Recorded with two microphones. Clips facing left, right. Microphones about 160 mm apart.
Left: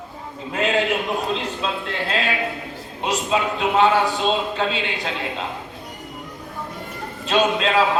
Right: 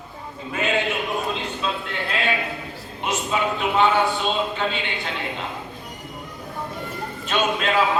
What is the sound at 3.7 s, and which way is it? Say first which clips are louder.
A man's voice: left 2 dB; 35° left (ahead or behind).